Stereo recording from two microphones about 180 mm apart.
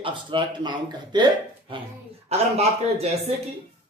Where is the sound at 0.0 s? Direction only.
25° right (ahead or behind).